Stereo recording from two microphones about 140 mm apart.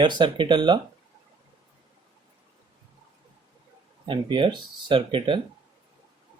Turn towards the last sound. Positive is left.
turn(degrees=-35)  # may be behind; listen again after turning